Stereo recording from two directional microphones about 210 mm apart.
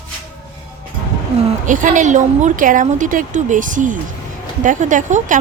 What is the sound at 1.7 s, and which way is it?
A woman's voice, 40° right (ahead or behind).